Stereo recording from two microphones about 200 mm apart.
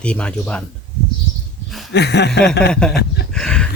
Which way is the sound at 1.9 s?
55° left (ahead or behind).